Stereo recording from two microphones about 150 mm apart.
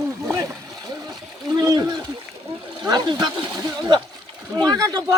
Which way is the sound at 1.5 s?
25° right (ahead or behind).